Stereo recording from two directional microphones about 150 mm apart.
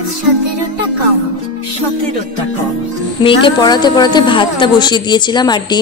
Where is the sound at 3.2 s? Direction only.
35° left (ahead or behind).